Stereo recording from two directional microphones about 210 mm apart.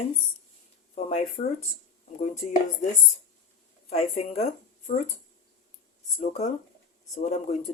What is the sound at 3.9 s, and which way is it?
Speech, 30° left (ahead or behind).